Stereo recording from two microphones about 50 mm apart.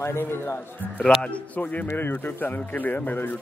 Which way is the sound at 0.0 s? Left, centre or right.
Left.